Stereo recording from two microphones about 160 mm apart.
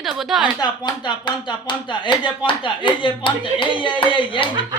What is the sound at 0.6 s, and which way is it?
Speech, 25° left (ahead or behind).